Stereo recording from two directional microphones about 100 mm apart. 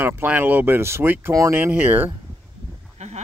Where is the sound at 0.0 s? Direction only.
20° right (ahead or behind).